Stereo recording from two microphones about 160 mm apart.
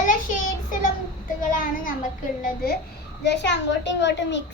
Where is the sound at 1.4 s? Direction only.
55° left (ahead or behind).